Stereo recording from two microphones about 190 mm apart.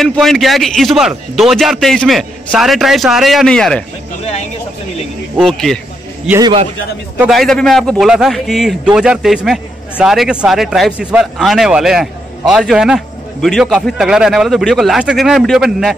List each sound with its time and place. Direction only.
0.0 s a man's voice: centre (ahead or behind)
5.4 s a man's voice: centre (ahead or behind)
6.4 s a man's voice: 25° right (ahead or behind)
7.2 s a man's voice: centre (ahead or behind)